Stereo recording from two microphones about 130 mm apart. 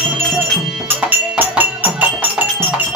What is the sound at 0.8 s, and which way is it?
Music, 15° right (ahead or behind).